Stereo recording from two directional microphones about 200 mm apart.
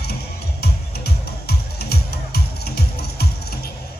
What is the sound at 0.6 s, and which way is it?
Music, 50° left (ahead or behind).